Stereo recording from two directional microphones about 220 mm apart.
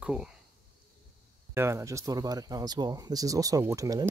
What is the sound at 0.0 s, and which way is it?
Speech, 5° right (ahead or behind).